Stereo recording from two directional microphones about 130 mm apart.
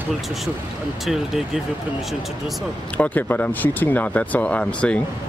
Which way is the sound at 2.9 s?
10° left (ahead or behind).